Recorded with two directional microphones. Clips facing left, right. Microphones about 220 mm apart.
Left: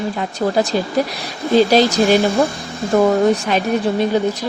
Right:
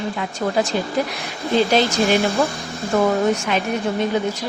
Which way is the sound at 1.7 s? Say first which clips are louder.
Left 4 dB; 35° left (ahead or behind).